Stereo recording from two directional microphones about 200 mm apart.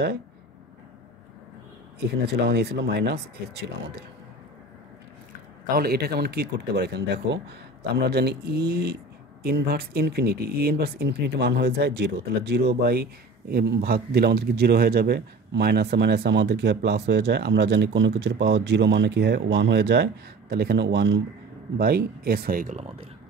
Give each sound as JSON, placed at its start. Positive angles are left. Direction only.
{"t": 2.0, "sound": "speech", "side_deg": -55}
{"t": 5.7, "sound": "speech", "side_deg": -50}